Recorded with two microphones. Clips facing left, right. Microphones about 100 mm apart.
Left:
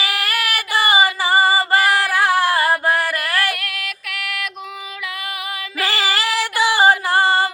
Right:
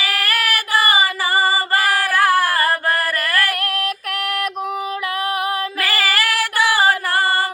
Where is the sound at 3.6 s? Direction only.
45° right (ahead or behind).